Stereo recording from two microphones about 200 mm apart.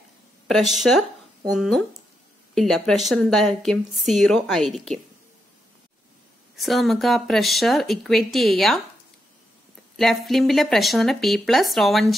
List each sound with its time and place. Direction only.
0.5 s speech: centre (ahead or behind)
6.5 s speech: centre (ahead or behind)
9.9 s speech: centre (ahead or behind)